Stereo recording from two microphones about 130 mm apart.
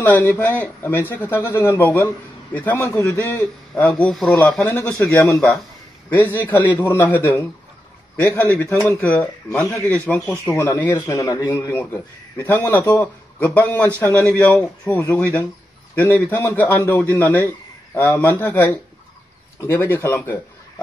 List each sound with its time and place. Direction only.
0.0 s speech: 15° left (ahead or behind)
4.9 s speech: 15° left (ahead or behind)
9.2 s speech: 10° left (ahead or behind)
11.0 s speech: 30° left (ahead or behind)